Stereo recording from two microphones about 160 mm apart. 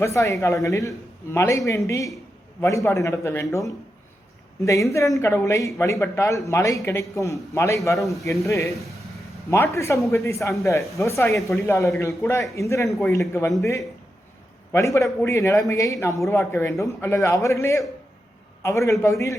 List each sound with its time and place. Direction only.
0.0 s a man's voice: 20° left (ahead or behind)
7.9 s speech: centre (ahead or behind)
8.2 s a man's voice: 20° left (ahead or behind)